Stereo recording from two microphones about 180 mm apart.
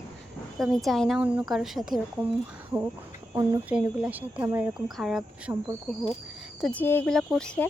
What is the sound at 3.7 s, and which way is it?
Speech, 5° right (ahead or behind).